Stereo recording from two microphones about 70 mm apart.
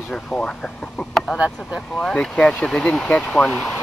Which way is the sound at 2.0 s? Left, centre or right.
Centre.